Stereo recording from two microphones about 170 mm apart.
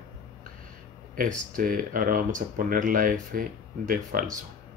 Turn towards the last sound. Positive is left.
turn(degrees=-55)  # may be behind; listen again after turning